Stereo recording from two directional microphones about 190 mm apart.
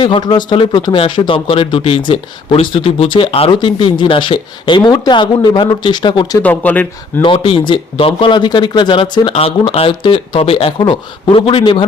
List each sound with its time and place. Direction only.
0.0 s speech: 25° left (ahead or behind)
6.4 s speech: 10° left (ahead or behind)
7.2 s speech: 25° left (ahead or behind)